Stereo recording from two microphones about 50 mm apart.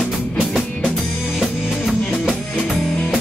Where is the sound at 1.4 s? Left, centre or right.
Centre.